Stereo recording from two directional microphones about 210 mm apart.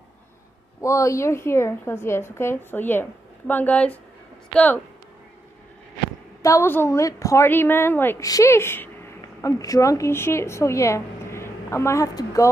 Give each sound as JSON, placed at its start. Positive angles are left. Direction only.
{"t": 0.7, "sound": "a woman's voice", "side_deg": 15}
{"t": 6.4, "sound": "a woman's voice", "side_deg": 15}